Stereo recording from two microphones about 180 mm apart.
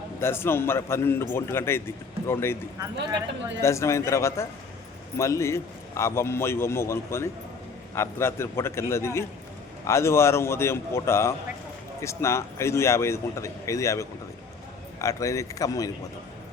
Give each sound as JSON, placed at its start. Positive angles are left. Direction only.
{"t": 0.2, "sound": "a man's voice", "side_deg": 15}
{"t": 2.7, "sound": "speech", "side_deg": -20}
{"t": 3.6, "sound": "a man's voice", "side_deg": 15}